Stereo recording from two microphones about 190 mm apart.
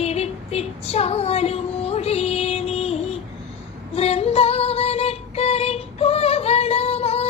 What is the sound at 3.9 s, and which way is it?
Female singing, 30° left (ahead or behind).